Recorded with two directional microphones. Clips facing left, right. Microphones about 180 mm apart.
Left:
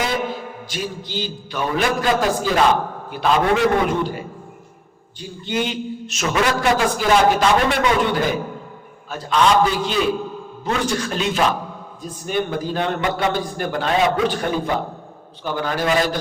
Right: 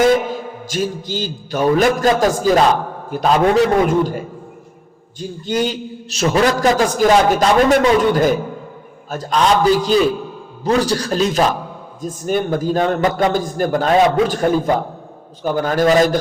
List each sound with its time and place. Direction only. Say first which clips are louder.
0.3 s a man's voice: right 4 dB; 45° right (ahead or behind)
5.5 s a man's voice: right 3 dB; 40° right (ahead or behind)